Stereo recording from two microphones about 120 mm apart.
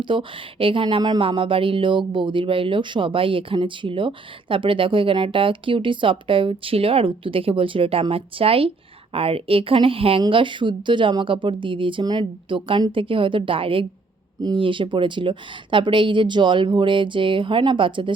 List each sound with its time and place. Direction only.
0.0 s speech: 45° right (ahead or behind)